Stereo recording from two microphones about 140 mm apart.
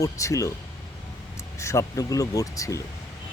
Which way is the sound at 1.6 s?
20° left (ahead or behind).